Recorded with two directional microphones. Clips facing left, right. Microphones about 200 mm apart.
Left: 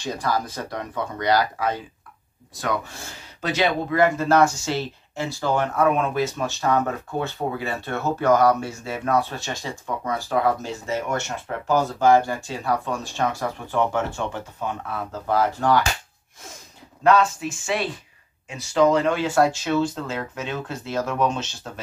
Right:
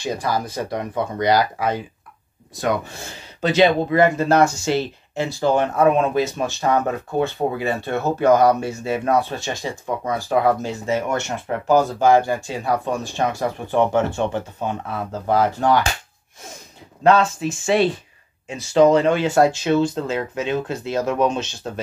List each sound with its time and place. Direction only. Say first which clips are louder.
0.0 s speech: right 2 dB; 10° right (ahead or behind)
3.3 s speech: right 7 dB; 25° right (ahead or behind)
17.0 s speech: right 2 dB; 25° right (ahead or behind)